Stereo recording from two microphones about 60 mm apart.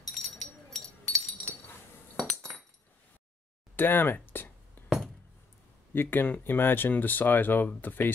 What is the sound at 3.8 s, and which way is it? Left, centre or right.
Speech, left.